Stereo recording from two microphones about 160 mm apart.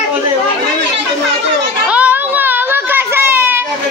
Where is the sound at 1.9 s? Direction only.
10° right (ahead or behind).